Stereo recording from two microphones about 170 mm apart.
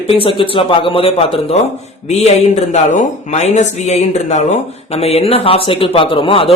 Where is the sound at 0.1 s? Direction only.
30° left (ahead or behind).